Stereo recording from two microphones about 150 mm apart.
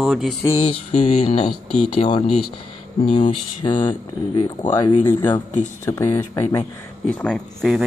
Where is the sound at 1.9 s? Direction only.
30° left (ahead or behind).